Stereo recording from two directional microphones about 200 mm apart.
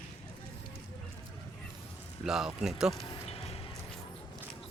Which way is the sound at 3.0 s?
30° left (ahead or behind).